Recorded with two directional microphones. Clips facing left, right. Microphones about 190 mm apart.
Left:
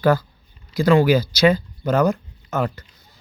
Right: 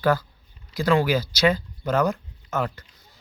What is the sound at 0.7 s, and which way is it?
A man's voice, 10° left (ahead or behind).